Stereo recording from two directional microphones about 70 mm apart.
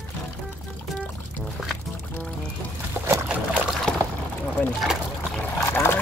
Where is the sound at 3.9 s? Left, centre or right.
Centre.